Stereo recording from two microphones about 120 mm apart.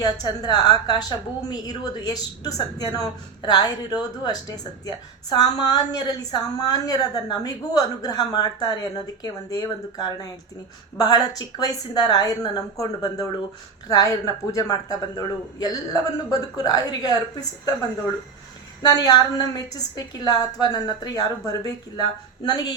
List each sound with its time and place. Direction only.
0.0 s a woman's voice: 35° left (ahead or behind)
18.8 s a woman's voice: 35° left (ahead or behind)